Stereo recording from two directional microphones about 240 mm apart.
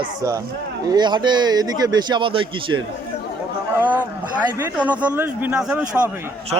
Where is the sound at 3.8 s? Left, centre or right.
Centre.